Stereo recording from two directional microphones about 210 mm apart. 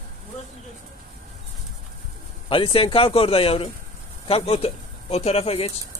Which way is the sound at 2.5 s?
25° left (ahead or behind).